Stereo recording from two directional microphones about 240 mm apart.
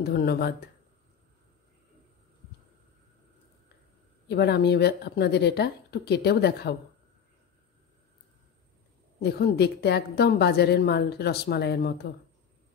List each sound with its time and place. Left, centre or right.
0.0 s speech: left
4.3 s a woman's voice: left
9.2 s a woman's voice: left